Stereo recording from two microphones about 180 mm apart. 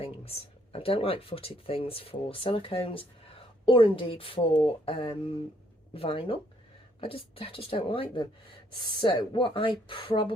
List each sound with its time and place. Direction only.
0.0 s a woman's voice: 30° left (ahead or behind)